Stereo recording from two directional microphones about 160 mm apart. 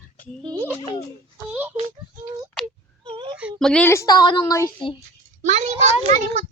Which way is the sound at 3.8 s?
20° left (ahead or behind).